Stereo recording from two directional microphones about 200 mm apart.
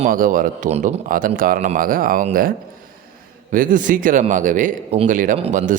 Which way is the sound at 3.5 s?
40° right (ahead or behind).